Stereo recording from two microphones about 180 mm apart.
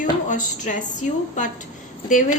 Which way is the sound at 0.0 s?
45° left (ahead or behind).